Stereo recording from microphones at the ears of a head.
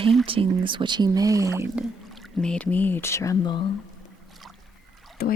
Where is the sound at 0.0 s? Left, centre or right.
Right.